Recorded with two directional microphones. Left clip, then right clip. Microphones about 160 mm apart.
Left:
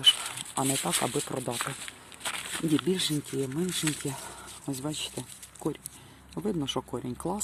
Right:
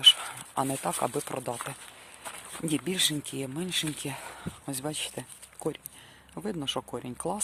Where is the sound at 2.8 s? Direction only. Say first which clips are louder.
Right 1 dB; 35° right (ahead or behind).